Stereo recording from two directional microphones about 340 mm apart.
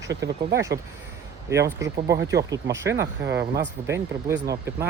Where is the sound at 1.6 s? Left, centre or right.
Centre.